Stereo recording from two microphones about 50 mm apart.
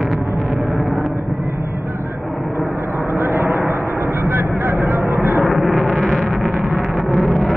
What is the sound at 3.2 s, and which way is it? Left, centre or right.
Vehicle, right.